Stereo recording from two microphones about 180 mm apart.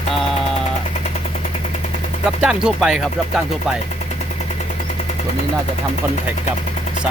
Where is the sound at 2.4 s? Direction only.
5° right (ahead or behind).